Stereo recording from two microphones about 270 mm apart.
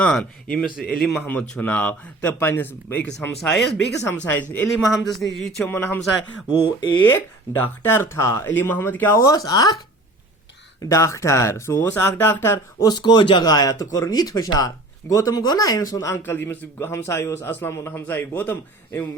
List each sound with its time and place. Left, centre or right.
0.0 s speech: centre
10.8 s speech: centre